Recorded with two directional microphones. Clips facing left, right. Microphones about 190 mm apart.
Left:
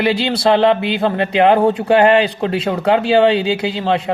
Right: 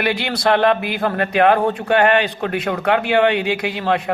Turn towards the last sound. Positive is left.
turn(degrees=25)  # may be behind; listen again after turning